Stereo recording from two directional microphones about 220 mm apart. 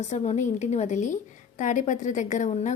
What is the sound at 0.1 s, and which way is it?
A woman's voice, 30° left (ahead or behind).